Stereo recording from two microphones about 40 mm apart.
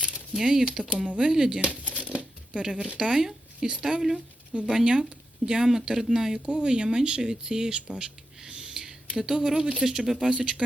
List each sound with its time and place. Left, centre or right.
0.1 s a sound: centre
0.6 s speech: right
1.2 s speech: centre
1.8 s crumpling: left
2.1 s a sound: right
3.0 s speech: right
6.4 s speech: right
7.9 s a sound: centre
9.8 s speech: centre